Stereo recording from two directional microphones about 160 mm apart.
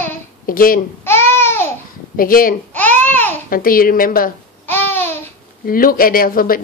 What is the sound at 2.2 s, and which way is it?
Speech, 60° left (ahead or behind).